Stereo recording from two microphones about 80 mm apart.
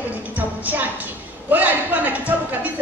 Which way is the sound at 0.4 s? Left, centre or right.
Right.